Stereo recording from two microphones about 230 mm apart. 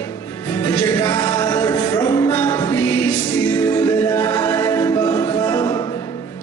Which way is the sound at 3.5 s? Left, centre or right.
Centre.